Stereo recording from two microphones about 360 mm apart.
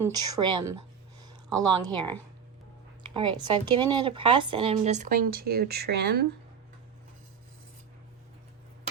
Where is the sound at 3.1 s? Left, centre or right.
Centre.